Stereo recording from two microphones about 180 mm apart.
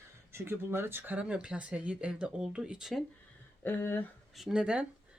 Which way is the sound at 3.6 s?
10° left (ahead or behind).